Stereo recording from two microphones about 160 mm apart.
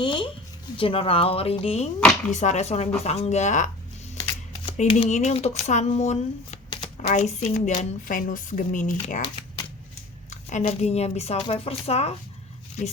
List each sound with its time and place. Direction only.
0.0 s a sound: 30° left (ahead or behind)
0.8 s a woman's voice: 35° left (ahead or behind); by 9.2 s 55° left (ahead or behind)
10.2 s a woman's voice: 50° left (ahead or behind)